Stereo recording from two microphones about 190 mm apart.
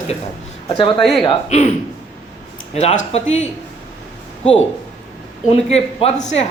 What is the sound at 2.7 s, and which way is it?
Speech, 35° left (ahead or behind).